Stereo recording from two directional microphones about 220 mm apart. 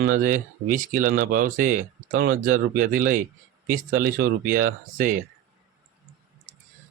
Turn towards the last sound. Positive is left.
turn(degrees=-40)  # may be behind; listen again after turning